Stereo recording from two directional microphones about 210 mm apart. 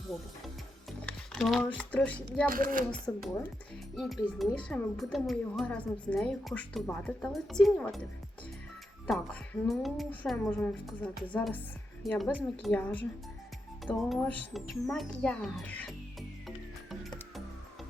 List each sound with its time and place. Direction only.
0.1 s music: centre (ahead or behind)
2.5 s speech: 40° right (ahead or behind)
3.1 s speech: 15° left (ahead or behind)
3.9 s speech: centre (ahead or behind)
9.0 s speech: 5° left (ahead or behind)
16.9 s music: centre (ahead or behind)